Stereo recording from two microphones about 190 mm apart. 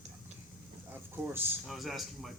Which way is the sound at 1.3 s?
Centre (ahead or behind).